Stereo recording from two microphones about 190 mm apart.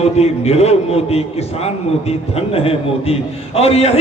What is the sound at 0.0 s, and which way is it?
A man's voice, 35° left (ahead or behind).